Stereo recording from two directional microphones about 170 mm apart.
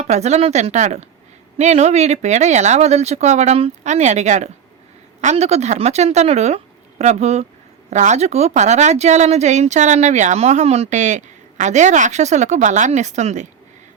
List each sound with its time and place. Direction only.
0.0 s speech: 40° right (ahead or behind)